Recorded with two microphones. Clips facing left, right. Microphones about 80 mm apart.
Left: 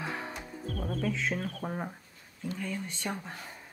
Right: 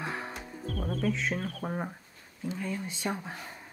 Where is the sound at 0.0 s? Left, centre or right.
Centre.